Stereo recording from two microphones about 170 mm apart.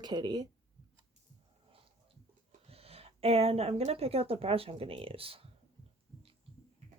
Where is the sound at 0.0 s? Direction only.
25° right (ahead or behind).